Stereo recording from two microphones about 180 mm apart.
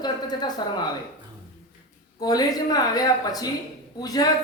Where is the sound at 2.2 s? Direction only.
20° left (ahead or behind).